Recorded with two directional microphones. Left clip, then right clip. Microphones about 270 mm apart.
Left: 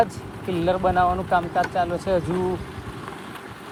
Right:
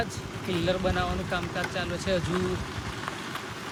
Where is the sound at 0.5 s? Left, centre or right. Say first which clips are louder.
Left 7 dB; centre.